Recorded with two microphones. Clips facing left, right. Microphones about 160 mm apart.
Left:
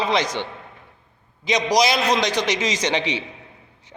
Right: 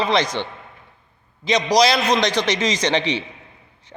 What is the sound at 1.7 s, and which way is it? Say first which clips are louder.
Speech: right 3 dB; 20° left (ahead or behind).